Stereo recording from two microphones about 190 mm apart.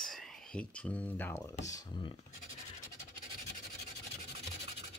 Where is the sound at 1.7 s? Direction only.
20° left (ahead or behind).